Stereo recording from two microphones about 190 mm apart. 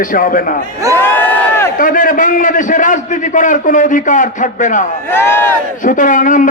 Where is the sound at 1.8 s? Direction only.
45° left (ahead or behind).